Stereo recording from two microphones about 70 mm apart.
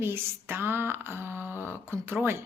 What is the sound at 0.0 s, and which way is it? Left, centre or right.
Speech, right.